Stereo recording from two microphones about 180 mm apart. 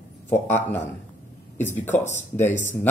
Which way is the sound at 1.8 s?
40° left (ahead or behind).